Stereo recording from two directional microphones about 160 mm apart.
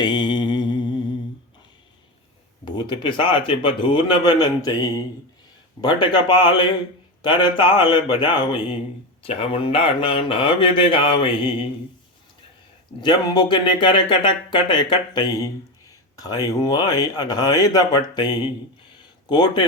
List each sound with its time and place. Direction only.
0.0 s mantra: 30° left (ahead or behind)
2.6 s speech: 30° left (ahead or behind)
13.0 s speech: 25° left (ahead or behind)